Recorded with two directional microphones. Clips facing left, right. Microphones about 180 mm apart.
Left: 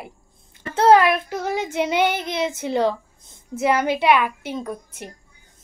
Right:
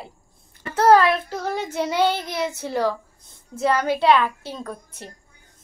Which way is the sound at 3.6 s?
15° left (ahead or behind).